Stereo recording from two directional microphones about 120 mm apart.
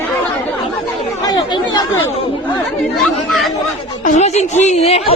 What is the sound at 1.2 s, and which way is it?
Speech, 35° left (ahead or behind).